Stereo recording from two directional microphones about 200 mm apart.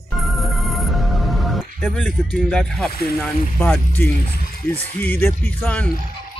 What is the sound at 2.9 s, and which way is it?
Speech, 50° left (ahead or behind).